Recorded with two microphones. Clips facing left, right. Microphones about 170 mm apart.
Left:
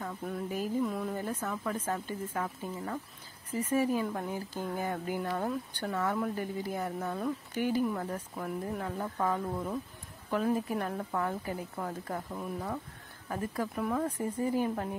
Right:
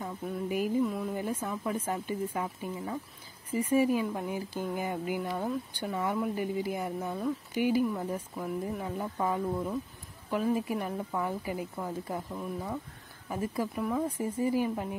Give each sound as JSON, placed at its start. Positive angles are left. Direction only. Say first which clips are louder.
{"t": 0.2, "sound": "speech", "louder": "right 4 dB", "side_deg": -10}
{"t": 0.8, "sound": "a sound", "louder": "right 1 dB", "side_deg": 0}
{"t": 1.1, "sound": "speech", "louder": "right 2 dB", "side_deg": -10}